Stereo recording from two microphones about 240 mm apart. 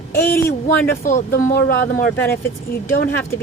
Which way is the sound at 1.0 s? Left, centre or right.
Left.